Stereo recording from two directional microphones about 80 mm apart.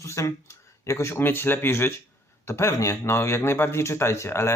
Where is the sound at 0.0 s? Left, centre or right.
Left.